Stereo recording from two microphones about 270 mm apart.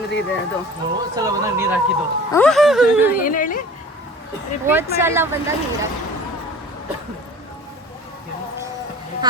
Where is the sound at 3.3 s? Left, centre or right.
Left.